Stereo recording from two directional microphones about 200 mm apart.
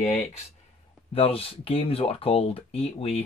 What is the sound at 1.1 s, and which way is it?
Speech, 30° left (ahead or behind).